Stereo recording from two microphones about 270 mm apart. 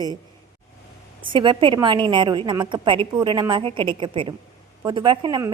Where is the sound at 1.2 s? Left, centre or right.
Centre.